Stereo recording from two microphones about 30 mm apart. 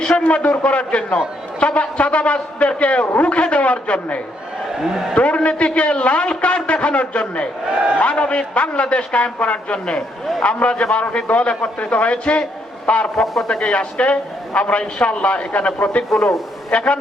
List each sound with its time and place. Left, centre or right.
0.2 s a man's voice: left
4.8 s a man's voice: centre
5.1 s a man's voice: left
7.7 s a man's voice: right
7.9 s a man's voice: left
13.2 s a man's voice: centre
13.5 s a man's voice: left
16.1 s a man's voice: centre
16.7 s a man's voice: left